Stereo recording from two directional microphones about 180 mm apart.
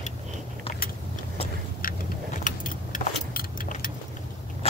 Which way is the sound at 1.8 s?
50° left (ahead or behind).